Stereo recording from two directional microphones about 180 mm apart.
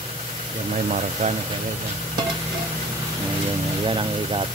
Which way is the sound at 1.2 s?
45° right (ahead or behind).